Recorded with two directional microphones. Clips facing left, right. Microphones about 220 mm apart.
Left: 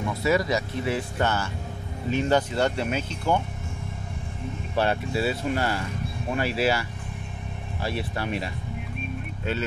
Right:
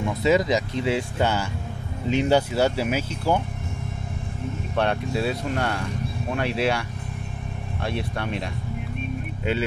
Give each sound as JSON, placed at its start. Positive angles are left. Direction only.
{"t": 0.2, "sound": "speech", "side_deg": -20}
{"t": 4.7, "sound": "speech", "side_deg": 5}